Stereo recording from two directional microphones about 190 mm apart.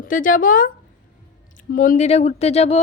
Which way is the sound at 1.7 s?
45° left (ahead or behind).